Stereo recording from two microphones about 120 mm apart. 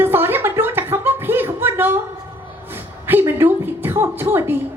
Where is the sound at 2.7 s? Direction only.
20° right (ahead or behind).